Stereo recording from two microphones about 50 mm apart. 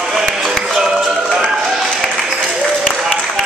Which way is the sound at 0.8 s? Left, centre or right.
Centre.